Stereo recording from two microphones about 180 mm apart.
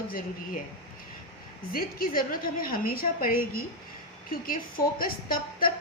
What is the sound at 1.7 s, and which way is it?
A woman's voice, 55° left (ahead or behind).